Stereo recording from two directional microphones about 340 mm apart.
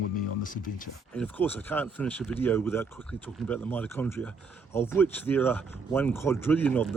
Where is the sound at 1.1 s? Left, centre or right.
Centre.